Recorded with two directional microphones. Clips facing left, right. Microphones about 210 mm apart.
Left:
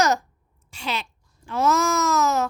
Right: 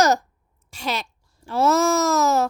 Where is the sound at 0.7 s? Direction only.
40° right (ahead or behind).